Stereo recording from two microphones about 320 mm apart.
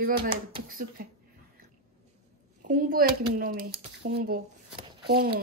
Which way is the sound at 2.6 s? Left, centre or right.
Right.